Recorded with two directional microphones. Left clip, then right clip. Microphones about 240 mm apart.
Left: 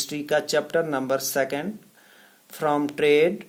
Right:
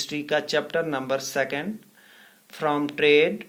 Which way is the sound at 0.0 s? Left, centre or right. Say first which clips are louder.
Left 1 dB; left.